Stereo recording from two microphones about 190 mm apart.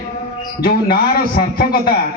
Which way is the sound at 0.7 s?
50° left (ahead or behind).